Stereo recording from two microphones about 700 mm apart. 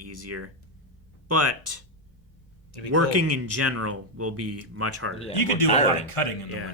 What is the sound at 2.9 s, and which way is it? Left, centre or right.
Speech, right.